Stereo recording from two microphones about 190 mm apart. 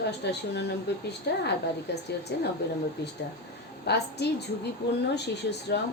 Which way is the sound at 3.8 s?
60° left (ahead or behind).